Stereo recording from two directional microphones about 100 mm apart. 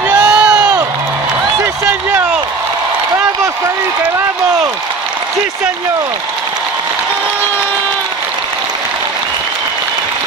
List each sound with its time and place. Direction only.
0.2 s crowd: 10° right (ahead or behind)